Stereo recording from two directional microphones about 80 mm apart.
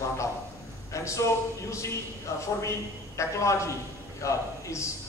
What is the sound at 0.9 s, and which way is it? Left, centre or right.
Speech, left.